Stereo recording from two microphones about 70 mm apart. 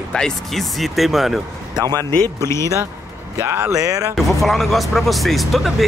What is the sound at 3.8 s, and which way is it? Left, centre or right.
Speech, right.